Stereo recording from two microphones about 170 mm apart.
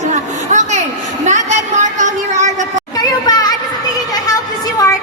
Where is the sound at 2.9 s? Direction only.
25° left (ahead or behind).